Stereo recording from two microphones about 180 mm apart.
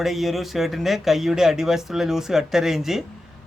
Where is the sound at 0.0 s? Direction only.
Centre (ahead or behind).